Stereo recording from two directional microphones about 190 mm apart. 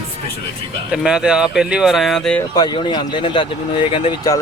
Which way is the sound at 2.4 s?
20° left (ahead or behind).